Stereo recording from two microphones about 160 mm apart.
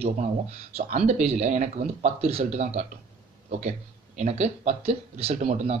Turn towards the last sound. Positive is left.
turn(degrees=-40)  # may be behind; listen again after turning